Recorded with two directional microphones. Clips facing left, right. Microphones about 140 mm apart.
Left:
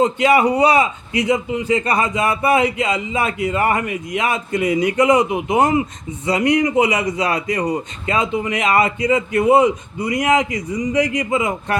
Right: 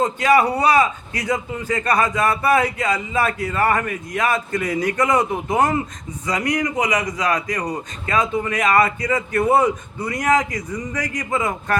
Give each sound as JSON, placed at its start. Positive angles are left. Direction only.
{"t": 0.0, "sound": "a man's voice", "side_deg": 25}